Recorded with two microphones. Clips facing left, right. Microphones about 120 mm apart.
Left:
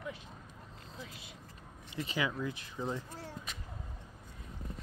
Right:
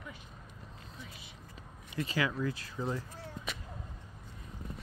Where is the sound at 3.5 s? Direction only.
65° right (ahead or behind).